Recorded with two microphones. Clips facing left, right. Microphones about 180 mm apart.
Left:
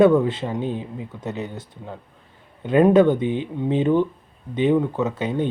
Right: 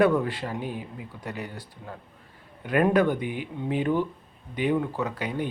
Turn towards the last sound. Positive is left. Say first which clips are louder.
# left 6 dB
turn(degrees=25)  # may be behind; listen again after turning